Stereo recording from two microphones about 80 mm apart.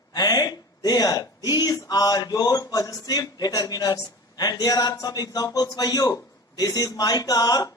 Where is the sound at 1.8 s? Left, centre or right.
Left.